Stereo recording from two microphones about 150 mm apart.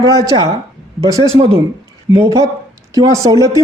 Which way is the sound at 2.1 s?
20° right (ahead or behind).